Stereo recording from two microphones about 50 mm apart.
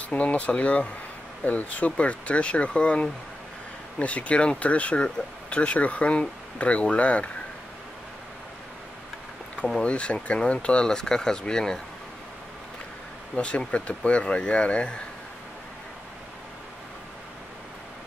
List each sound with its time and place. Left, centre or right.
0.1 s speech: left
9.8 s speech: left
13.7 s speech: left